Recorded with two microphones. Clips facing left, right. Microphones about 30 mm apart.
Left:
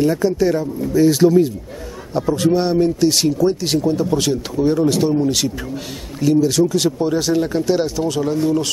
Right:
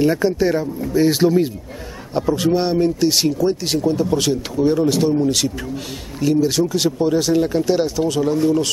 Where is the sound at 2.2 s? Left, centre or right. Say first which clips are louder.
Left 1 dB; centre.